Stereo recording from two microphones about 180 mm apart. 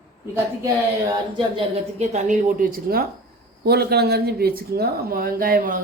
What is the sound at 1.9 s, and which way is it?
A woman's voice, 40° right (ahead or behind).